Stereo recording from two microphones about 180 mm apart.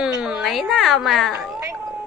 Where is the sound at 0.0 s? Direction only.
5° right (ahead or behind).